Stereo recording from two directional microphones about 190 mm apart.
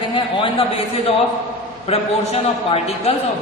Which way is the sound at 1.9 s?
30° left (ahead or behind).